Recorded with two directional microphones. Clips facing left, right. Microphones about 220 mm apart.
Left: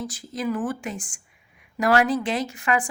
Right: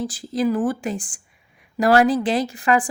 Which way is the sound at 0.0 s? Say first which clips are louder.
Right 7 dB; 30° right (ahead or behind).